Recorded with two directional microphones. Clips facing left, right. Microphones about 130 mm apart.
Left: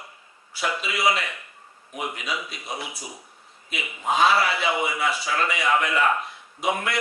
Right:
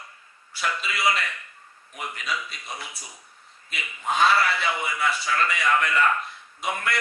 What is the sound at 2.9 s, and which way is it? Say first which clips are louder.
A man's voice: left 6 dB; 25° left (ahead or behind).